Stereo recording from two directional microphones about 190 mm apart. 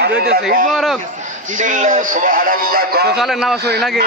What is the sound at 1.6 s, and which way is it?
A man's voice, 40° right (ahead or behind).